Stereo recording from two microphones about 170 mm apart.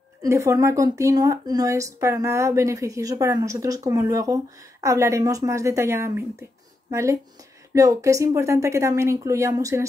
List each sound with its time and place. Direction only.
0.2 s a woman's voice: 20° right (ahead or behind)